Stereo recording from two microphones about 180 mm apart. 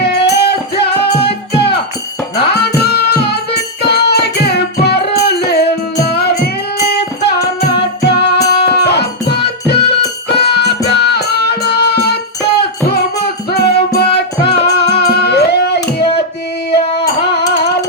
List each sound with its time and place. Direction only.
0.0 s music: 65° left (ahead or behind)